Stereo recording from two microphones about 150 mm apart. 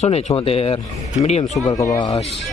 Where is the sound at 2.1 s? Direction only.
45° left (ahead or behind).